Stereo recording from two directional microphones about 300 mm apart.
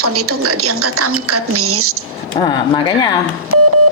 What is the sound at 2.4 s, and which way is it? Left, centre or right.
Speech, centre.